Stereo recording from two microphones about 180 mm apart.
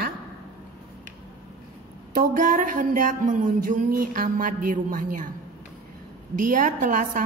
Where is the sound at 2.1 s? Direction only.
50° right (ahead or behind).